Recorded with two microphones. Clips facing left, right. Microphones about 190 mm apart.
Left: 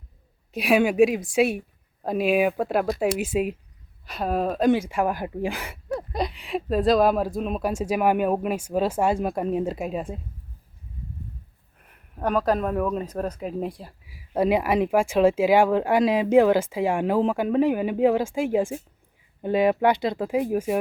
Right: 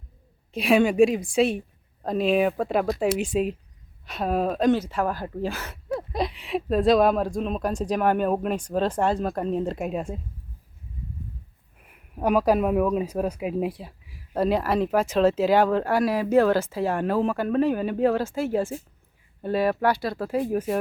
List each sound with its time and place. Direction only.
0.5 s speech: 5° left (ahead or behind)
5.9 s speech: centre (ahead or behind)
11.8 s speech: 10° right (ahead or behind)
14.1 s speech: 10° left (ahead or behind)